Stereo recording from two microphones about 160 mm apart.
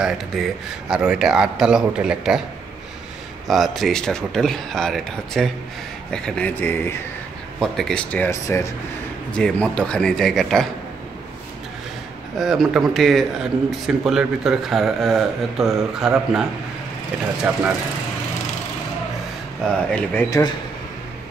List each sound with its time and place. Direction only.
0.0 s speech: 5° right (ahead or behind)
3.4 s speech: centre (ahead or behind)
12.4 s speech: centre (ahead or behind)
17.5 s speech: 5° right (ahead or behind)
19.9 s speech: 5° left (ahead or behind)
20.2 s speech: 20° left (ahead or behind)